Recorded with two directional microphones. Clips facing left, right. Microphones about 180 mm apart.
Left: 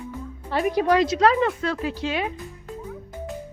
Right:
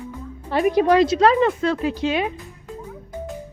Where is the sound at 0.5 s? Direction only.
20° right (ahead or behind).